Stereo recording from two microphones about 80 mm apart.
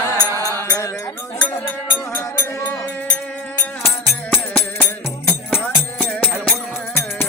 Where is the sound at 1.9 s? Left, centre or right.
Left.